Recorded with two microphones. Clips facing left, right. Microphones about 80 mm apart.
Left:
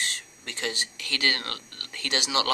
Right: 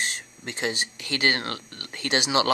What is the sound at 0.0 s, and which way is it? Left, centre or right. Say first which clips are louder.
Speech: right 3 dB; right.